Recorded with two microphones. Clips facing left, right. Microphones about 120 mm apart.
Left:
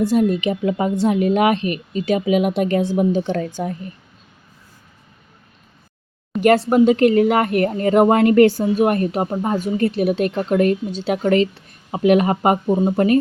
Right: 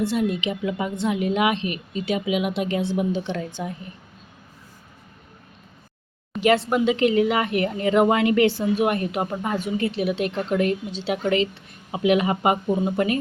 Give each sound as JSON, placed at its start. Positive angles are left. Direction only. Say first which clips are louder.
{"t": 0.0, "sound": "speech", "louder": "left 6 dB", "side_deg": 40}
{"t": 6.4, "sound": "speech", "louder": "left 6 dB", "side_deg": 45}
{"t": 9.2, "sound": "speech", "louder": "left 5 dB", "side_deg": 30}